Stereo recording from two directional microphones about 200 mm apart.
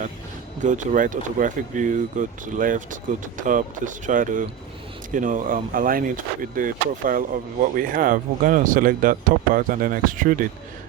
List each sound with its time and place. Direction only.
0.6 s speech: 40° right (ahead or behind)